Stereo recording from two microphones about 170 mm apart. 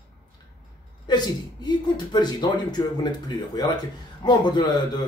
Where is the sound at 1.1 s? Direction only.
25° left (ahead or behind).